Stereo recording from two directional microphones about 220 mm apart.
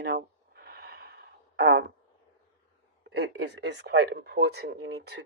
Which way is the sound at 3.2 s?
50° right (ahead or behind).